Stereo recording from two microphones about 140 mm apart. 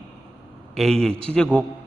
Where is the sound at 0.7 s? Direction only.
5° left (ahead or behind).